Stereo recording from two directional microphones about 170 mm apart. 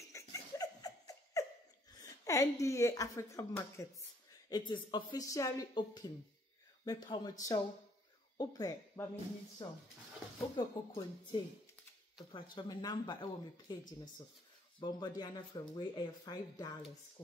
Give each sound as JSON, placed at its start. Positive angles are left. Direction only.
{"t": 0.0, "sound": "a sound", "side_deg": 20}
{"t": 2.0, "sound": "a woman's voice", "side_deg": 20}
{"t": 10.5, "sound": "speech", "side_deg": 30}
{"t": 14.8, "sound": "speech", "side_deg": 25}